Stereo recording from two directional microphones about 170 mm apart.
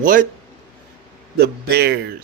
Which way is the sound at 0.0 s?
55° right (ahead or behind).